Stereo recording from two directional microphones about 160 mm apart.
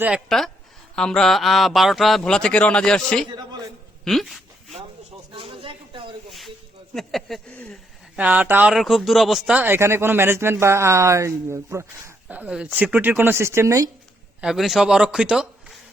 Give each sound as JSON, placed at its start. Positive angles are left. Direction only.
{"t": 0.3, "sound": "speech", "side_deg": 0}
{"t": 5.4, "sound": "a sound", "side_deg": -35}
{"t": 6.9, "sound": "speech", "side_deg": 0}
{"t": 8.1, "sound": "speech", "side_deg": -10}
{"t": 9.6, "sound": "speech", "side_deg": -15}
{"t": 14.4, "sound": "speech", "side_deg": 0}